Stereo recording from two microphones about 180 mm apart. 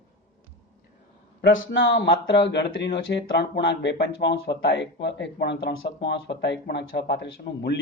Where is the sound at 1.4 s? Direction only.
90° left.